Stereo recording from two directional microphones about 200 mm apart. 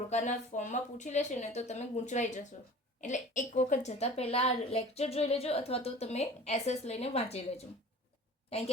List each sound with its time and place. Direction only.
0.1 s a woman's voice: 35° left (ahead or behind)